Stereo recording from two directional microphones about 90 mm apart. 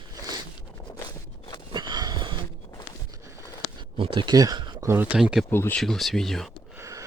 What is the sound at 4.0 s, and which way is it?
Speech, 70° right (ahead or behind).